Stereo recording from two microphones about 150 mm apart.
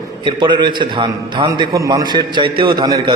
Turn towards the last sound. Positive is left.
turn(degrees=-30)  # may be behind; listen again after turning